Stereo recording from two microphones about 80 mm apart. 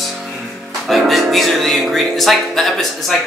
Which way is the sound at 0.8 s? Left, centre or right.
Centre.